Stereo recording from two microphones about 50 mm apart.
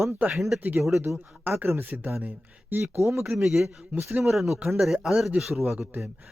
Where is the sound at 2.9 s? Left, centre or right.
Right.